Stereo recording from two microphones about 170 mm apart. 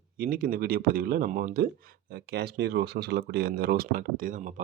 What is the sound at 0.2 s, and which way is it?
Speech, 55° right (ahead or behind).